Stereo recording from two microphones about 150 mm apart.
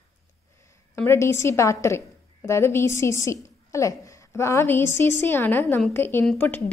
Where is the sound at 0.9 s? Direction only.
15° left (ahead or behind).